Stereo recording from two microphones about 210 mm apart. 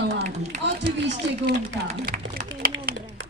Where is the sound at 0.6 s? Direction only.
55° right (ahead or behind).